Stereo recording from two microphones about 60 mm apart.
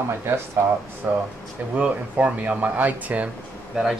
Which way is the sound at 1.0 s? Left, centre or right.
Right.